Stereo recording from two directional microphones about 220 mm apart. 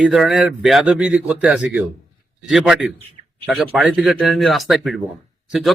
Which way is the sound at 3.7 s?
Centre (ahead or behind).